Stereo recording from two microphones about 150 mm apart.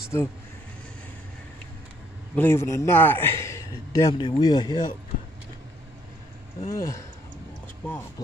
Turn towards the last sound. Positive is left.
turn(degrees=15)  # may be behind; listen again after turning